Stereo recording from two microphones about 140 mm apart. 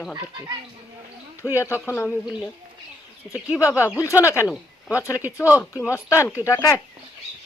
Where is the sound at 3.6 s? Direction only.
20° left (ahead or behind).